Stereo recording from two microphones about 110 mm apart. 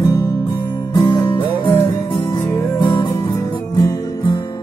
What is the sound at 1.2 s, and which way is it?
Music, 50° left (ahead or behind).